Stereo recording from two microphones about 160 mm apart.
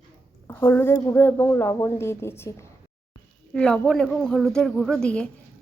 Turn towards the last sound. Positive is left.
turn(degrees=5)  # may be behind; listen again after turning